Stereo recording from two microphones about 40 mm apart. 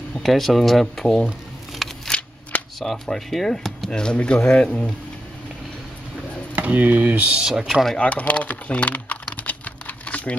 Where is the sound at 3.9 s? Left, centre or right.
Left.